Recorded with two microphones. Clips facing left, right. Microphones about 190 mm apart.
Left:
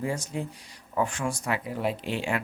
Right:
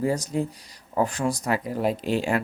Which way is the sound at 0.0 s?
40° right (ahead or behind).